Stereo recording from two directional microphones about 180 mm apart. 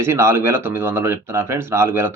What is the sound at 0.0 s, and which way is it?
Speech, 15° right (ahead or behind).